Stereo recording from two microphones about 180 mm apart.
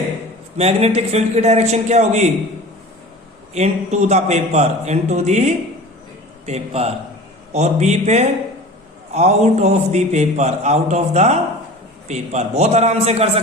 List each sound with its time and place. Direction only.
0.5 s a man's voice: 35° right (ahead or behind)
3.5 s a man's voice: 40° right (ahead or behind)